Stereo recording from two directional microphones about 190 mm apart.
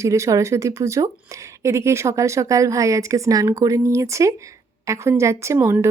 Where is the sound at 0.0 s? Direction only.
15° right (ahead or behind).